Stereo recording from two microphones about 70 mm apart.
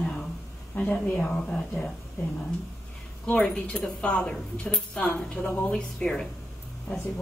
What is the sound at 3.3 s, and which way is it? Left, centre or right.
A woman's voice, centre.